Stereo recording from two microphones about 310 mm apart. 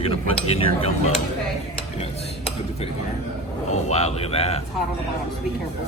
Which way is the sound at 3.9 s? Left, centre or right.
Left.